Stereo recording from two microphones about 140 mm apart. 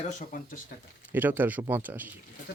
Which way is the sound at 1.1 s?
15° right (ahead or behind).